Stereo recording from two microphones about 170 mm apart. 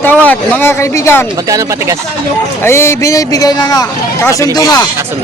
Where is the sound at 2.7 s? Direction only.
15° left (ahead or behind).